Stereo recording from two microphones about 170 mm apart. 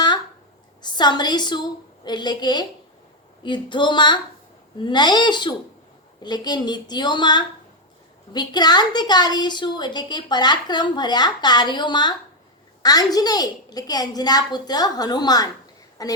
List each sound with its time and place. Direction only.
0.8 s a woman's voice: 25° left (ahead or behind)